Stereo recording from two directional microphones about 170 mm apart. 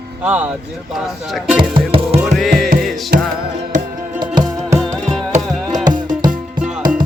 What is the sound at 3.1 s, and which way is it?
Music, 60° right (ahead or behind).